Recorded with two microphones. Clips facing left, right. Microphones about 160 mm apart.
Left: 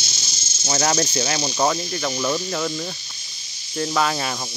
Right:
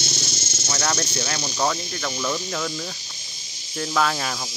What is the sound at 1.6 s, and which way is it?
Speech, 15° left (ahead or behind).